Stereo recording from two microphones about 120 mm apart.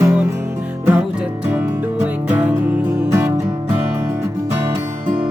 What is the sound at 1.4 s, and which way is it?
Music, 15° right (ahead or behind).